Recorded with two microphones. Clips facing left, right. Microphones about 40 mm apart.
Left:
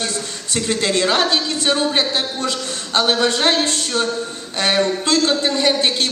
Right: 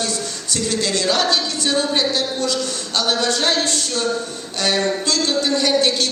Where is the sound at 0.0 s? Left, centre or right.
Left.